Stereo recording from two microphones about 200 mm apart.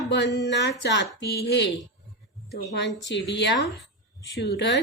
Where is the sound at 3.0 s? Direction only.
60° left (ahead or behind).